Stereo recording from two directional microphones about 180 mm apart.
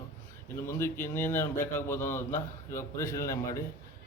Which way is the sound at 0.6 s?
15° left (ahead or behind).